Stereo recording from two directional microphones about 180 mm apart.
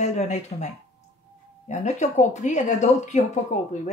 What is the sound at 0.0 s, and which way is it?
Speech, 40° left (ahead or behind).